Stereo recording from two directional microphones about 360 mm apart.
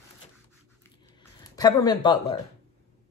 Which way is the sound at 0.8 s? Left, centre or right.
Centre.